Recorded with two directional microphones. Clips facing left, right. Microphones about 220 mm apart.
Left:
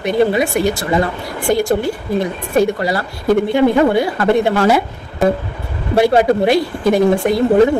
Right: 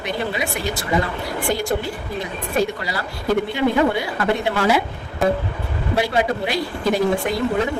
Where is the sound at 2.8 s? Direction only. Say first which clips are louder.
Left 8 dB; 50° left (ahead or behind).